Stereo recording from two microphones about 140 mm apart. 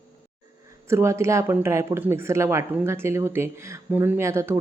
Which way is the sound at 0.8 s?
20° right (ahead or behind).